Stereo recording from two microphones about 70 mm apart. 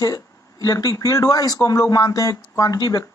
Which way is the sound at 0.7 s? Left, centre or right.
Left.